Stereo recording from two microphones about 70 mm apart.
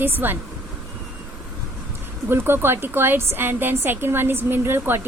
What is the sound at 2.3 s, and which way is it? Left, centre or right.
A woman's voice, right.